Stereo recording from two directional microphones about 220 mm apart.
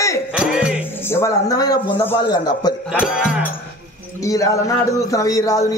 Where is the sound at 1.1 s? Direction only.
10° left (ahead or behind).